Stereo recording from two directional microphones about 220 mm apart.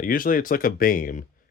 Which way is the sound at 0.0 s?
40° left (ahead or behind).